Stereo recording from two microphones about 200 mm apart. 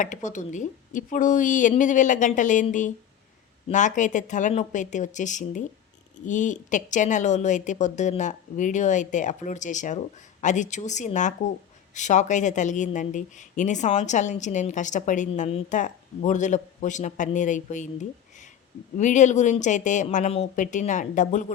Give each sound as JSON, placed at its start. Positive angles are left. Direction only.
{"t": 0.0, "sound": "speech", "side_deg": 40}